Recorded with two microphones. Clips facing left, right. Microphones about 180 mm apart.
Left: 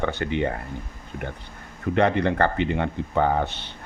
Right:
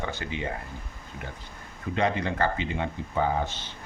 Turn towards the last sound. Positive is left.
turn(degrees=65)  # may be behind; listen again after turning